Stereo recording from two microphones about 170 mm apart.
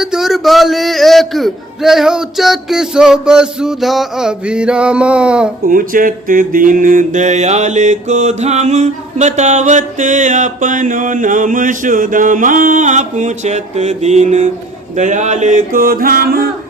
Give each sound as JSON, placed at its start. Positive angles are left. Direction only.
{"t": 0.0, "sound": "a man's voice", "side_deg": -5}
{"t": 5.6, "sound": "mantra", "side_deg": -55}